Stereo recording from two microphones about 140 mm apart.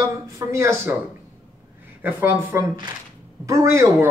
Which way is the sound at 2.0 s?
15° right (ahead or behind).